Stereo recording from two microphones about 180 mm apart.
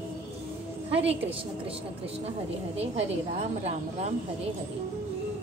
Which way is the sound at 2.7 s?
35° right (ahead or behind).